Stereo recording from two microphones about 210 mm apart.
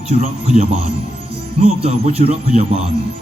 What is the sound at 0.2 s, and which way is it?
Speech, 35° right (ahead or behind).